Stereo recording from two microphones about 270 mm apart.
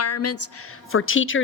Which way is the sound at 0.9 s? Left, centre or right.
Left.